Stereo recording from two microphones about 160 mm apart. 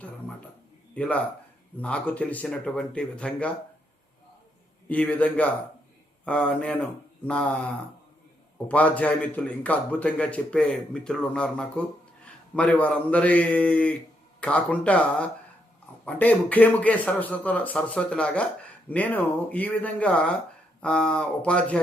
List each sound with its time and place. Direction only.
0.9 s a man's voice: 10° left (ahead or behind)
4.9 s a man's voice: 10° left (ahead or behind)